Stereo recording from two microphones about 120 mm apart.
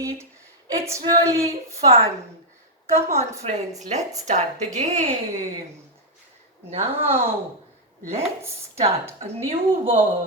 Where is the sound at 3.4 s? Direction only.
75° right (ahead or behind).